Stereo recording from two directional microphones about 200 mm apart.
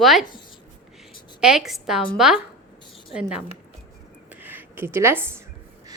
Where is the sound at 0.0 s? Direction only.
Centre (ahead or behind).